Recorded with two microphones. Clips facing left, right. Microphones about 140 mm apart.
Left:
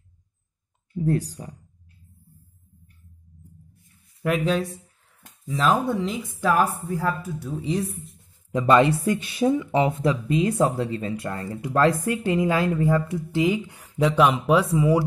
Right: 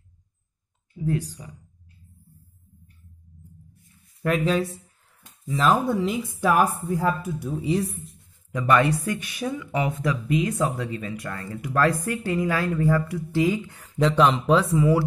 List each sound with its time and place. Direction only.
1.0 s speech: 40° left (ahead or behind)
4.2 s speech: centre (ahead or behind)
6.4 s speech: 15° right (ahead or behind)
7.6 s speech: centre (ahead or behind)
8.5 s speech: 25° left (ahead or behind)